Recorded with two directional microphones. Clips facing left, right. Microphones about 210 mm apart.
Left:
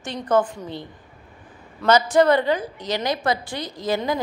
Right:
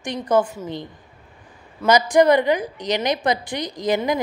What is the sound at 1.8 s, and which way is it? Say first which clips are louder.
A woman's voice: right 1 dB; 15° right (ahead or behind).